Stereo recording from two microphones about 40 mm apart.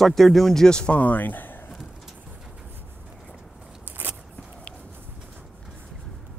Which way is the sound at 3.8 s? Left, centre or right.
Right.